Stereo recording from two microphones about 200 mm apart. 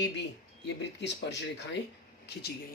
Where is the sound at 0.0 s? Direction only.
60° left (ahead or behind).